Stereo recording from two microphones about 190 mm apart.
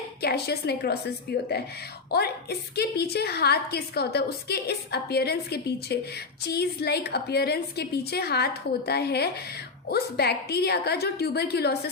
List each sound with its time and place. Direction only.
0.2 s a woman's voice: 55° left (ahead or behind)
2.0 s a woman's voice: 55° left (ahead or behind)